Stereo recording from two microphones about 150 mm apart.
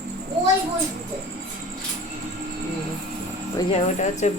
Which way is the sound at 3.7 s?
50° left (ahead or behind).